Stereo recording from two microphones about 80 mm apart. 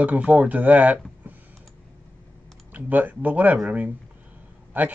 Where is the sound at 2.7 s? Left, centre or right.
Right.